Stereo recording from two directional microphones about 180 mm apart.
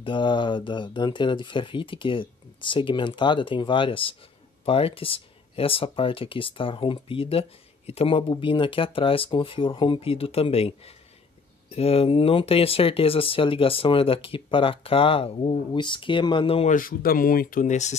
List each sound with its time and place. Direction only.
0.0 s speech: 25° left (ahead or behind)
16.7 s speech: 55° left (ahead or behind)